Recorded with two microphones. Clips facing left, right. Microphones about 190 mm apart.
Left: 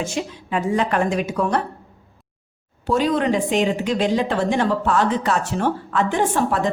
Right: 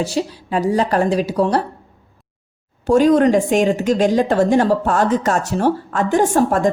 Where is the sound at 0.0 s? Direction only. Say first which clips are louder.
Right 5 dB; 35° right (ahead or behind).